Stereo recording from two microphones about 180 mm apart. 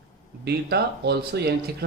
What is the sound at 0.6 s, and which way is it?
Speech, 65° right (ahead or behind).